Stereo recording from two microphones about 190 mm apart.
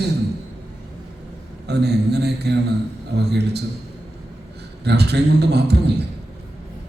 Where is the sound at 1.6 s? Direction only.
60° right (ahead or behind).